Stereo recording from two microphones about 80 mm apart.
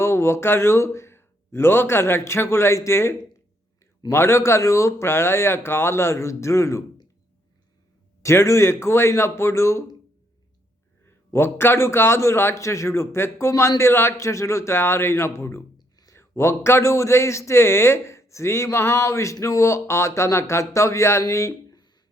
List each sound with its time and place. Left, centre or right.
0.0 s a man's voice: left
8.2 s a man's voice: left
11.0 s a man's voice: left